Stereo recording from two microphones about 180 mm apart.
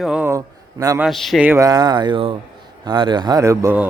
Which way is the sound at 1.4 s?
15° right (ahead or behind).